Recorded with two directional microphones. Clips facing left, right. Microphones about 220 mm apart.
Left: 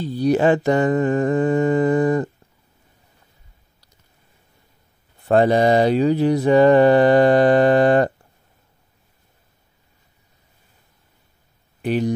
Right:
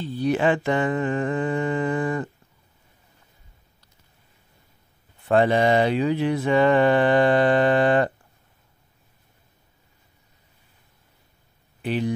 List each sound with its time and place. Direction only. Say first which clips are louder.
0.0 s mantra: left 5 dB; 40° left (ahead or behind)
5.3 s mantra: left 4 dB; 40° left (ahead or behind)
11.8 s speech: left 4 dB; 45° left (ahead or behind)